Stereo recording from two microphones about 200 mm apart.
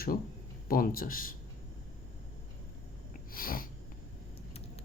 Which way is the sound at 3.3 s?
45° left (ahead or behind).